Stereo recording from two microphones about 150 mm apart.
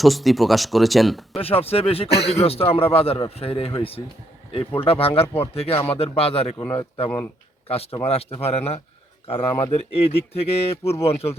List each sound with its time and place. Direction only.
0.0 s speech: centre (ahead or behind)
1.4 s a man's voice: 40° left (ahead or behind)
6.6 s speech: 15° left (ahead or behind)
7.7 s a man's voice: 40° left (ahead or behind)